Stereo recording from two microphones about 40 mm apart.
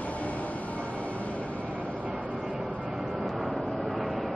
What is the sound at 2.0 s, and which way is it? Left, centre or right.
Vehicle, right.